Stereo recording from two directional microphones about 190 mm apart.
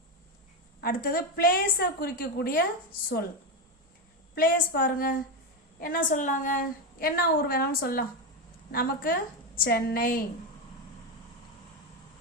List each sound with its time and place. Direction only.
0.8 s a woman's voice: 50° left (ahead or behind)
4.4 s a woman's voice: 50° left (ahead or behind)